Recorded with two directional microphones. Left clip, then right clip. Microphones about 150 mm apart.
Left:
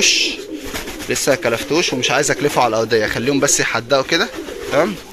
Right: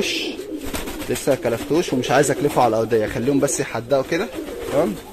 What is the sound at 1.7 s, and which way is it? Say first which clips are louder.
Speech: left 1 dB; 25° right (ahead or behind).